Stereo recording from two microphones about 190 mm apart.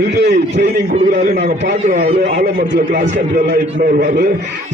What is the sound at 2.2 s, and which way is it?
A man's voice, 40° right (ahead or behind).